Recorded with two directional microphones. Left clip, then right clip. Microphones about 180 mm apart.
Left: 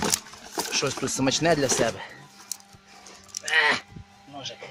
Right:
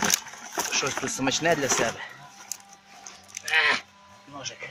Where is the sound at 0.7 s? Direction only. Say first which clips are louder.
Left 1 dB; 50° left (ahead or behind).